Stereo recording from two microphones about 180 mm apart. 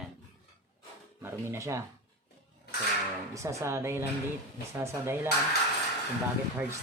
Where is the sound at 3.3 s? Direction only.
15° right (ahead or behind).